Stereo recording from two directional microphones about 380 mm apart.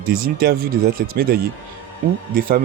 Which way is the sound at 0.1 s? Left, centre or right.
Right.